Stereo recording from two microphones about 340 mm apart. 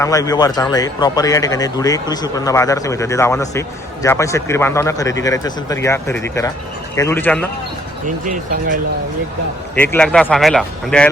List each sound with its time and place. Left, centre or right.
0.0 s speech: centre
8.0 s speech: right
9.7 s speech: centre